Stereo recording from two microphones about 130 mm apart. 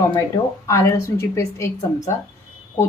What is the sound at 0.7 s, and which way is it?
Speech, 25° left (ahead or behind).